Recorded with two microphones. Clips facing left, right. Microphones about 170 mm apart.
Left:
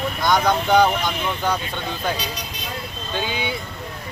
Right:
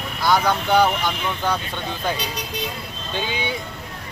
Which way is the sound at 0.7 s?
15° left (ahead or behind).